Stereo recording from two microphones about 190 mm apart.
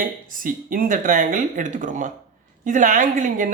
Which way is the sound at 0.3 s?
45° right (ahead or behind).